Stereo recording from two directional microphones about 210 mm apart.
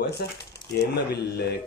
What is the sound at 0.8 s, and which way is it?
Speech, 50° left (ahead or behind).